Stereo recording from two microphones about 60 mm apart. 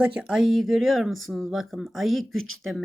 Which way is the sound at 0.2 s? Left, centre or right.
Centre.